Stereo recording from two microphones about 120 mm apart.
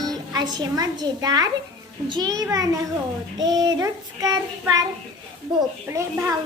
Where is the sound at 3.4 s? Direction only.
35° right (ahead or behind).